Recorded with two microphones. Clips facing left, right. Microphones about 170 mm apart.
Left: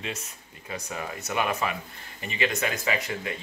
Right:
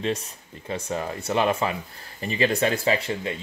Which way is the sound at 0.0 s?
30° right (ahead or behind).